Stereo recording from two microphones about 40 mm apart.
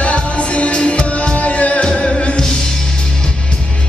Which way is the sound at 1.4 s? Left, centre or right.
Left.